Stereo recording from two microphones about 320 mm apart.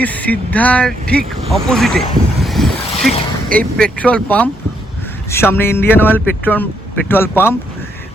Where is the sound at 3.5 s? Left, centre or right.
Centre.